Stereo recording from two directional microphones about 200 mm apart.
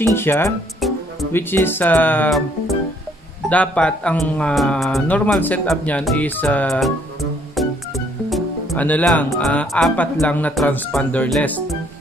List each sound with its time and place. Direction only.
0.0 s speech: 10° left (ahead or behind)
3.4 s speech: 5° left (ahead or behind)